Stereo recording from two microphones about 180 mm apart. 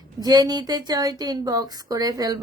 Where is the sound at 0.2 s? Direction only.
20° right (ahead or behind).